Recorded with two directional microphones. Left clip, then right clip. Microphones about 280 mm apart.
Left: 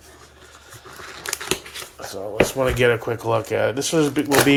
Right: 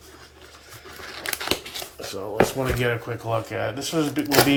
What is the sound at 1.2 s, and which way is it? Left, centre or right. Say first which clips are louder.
Crumpling: even; centre.